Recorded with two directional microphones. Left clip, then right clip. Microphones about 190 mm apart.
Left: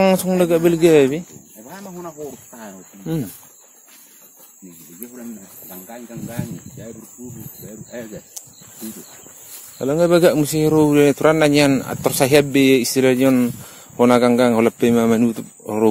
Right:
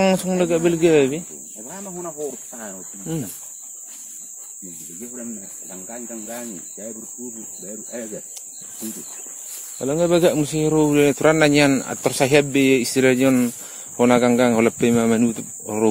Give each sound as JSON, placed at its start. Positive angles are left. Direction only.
{"t": 0.0, "sound": "speech", "side_deg": 10}
{"t": 1.7, "sound": "cricket", "side_deg": 50}
{"t": 2.3, "sound": "a sound", "side_deg": 45}
{"t": 3.0, "sound": "speech", "side_deg": 20}
{"t": 5.9, "sound": "speech", "side_deg": 45}
{"t": 8.4, "sound": "snake", "side_deg": 10}
{"t": 9.8, "sound": "speech", "side_deg": 15}
{"t": 11.2, "sound": "speech", "side_deg": 0}
{"t": 12.9, "sound": "speech", "side_deg": 0}